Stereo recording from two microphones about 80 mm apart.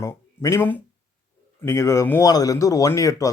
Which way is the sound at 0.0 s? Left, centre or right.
Left.